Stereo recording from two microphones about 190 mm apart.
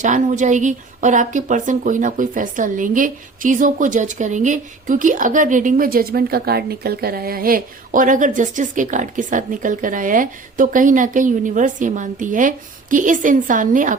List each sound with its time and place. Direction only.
0.0 s speech: 40° right (ahead or behind)